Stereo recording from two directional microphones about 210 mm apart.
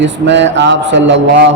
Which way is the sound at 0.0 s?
55° right (ahead or behind).